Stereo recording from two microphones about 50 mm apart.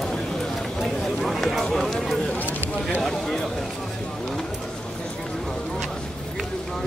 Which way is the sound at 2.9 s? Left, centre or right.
Centre.